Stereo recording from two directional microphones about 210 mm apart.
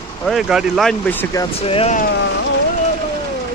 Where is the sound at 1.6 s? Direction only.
30° left (ahead or behind).